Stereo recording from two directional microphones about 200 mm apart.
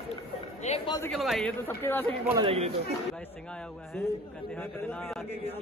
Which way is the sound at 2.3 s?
30° right (ahead or behind).